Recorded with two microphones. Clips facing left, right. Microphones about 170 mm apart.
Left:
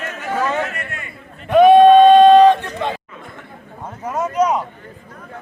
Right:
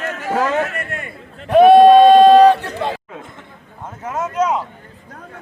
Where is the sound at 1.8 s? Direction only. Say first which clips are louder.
Even; 35° right (ahead or behind).